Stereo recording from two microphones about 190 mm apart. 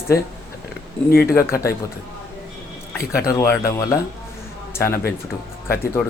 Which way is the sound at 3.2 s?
15° left (ahead or behind).